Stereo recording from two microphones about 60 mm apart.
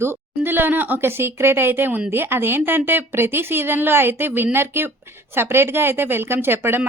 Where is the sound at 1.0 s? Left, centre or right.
Right.